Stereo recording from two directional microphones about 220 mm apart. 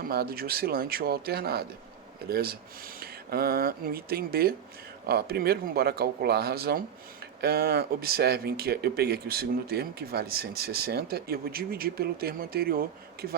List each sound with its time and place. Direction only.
0.0 s speech: 40° right (ahead or behind)